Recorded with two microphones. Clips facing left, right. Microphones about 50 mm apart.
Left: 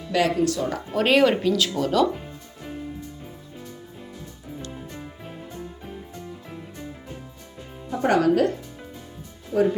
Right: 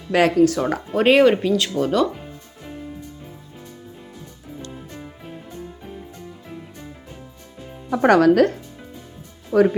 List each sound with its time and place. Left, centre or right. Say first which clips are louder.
0.1 s speech: right 6 dB; right
0.9 s speech: right 4 dB; centre
7.9 s speech: right 6 dB; right
9.5 s speech: right 5 dB; right